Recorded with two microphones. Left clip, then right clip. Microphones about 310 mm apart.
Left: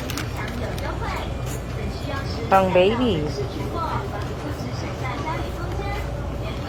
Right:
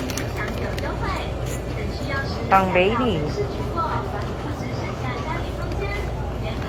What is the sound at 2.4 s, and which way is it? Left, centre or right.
Speech, left.